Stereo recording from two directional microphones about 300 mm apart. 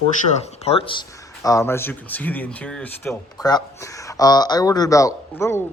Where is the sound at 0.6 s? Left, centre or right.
Centre.